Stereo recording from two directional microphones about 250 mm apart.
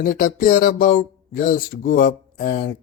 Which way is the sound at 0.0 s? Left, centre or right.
Left.